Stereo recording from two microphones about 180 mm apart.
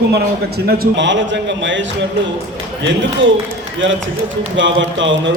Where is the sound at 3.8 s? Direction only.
90° right.